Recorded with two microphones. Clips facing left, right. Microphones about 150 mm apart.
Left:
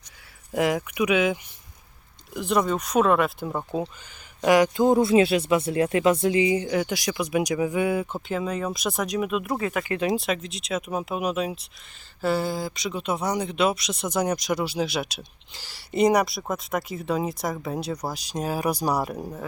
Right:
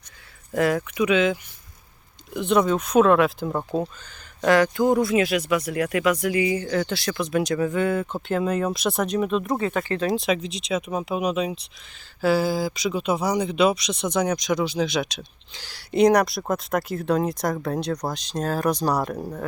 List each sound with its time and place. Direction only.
0.5 s speech: 15° left (ahead or behind)
4.4 s speech: 15° left (ahead or behind)
8.4 s speech: centre (ahead or behind)
9.5 s speech: 25° right (ahead or behind)
9.9 s speech: 15° left (ahead or behind)
10.2 s speech: centre (ahead or behind)